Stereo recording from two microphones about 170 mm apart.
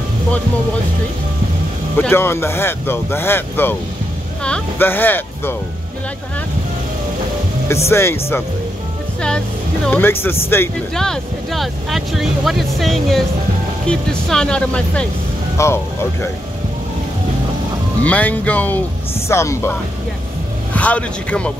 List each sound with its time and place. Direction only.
2.0 s speech: 15° left (ahead or behind)
7.6 s speech: 15° left (ahead or behind)
9.8 s speech: 10° left (ahead or behind)
11.0 s speech: centre (ahead or behind)
15.5 s speech: 15° left (ahead or behind)
18.0 s speech: 10° left (ahead or behind)